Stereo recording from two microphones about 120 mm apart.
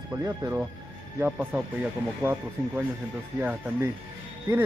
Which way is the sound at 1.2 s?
15° right (ahead or behind).